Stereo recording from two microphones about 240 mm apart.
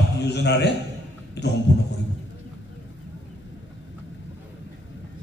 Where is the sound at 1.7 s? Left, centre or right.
Left.